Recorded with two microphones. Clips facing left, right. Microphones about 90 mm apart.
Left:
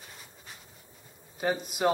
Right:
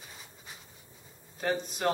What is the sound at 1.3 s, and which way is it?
Speech, 5° left (ahead or behind).